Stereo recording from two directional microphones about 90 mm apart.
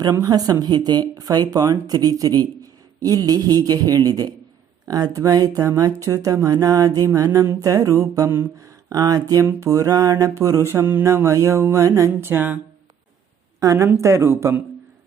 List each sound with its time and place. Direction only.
0.0 s speech: 45° right (ahead or behind); by 12.5 s 25° right (ahead or behind)
13.6 s speech: 35° right (ahead or behind)